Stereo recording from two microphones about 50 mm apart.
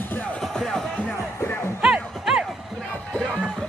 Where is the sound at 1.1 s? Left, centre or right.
Left.